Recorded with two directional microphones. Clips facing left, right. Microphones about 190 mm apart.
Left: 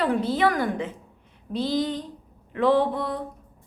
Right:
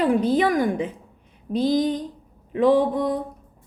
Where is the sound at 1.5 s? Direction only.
15° right (ahead or behind).